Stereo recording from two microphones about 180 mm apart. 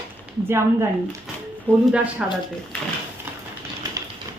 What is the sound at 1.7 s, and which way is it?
Speech, 10° left (ahead or behind).